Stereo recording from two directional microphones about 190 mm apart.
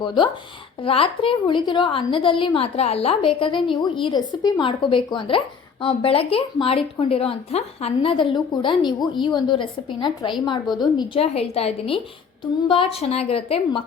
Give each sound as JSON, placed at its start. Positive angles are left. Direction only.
{"t": 0.0, "sound": "a woman's voice", "side_deg": 25}